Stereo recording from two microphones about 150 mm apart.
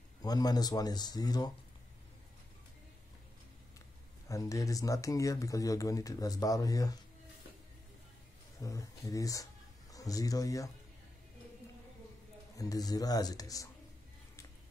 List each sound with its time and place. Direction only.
0.2 s speech: 25° left (ahead or behind)
4.3 s speech: 20° left (ahead or behind)
8.5 s speech: 20° left (ahead or behind)
12.5 s speech: 25° left (ahead or behind)